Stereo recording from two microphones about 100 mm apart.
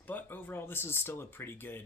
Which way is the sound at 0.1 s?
20° left (ahead or behind).